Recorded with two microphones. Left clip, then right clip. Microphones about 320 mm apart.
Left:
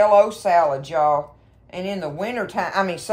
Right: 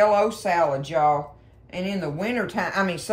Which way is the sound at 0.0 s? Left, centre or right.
Centre.